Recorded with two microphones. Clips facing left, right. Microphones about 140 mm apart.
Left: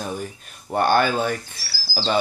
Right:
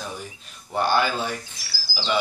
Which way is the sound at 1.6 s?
15° right (ahead or behind).